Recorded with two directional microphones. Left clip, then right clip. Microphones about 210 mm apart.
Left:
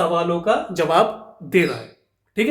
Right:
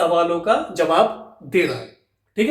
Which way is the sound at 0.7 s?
35° left (ahead or behind).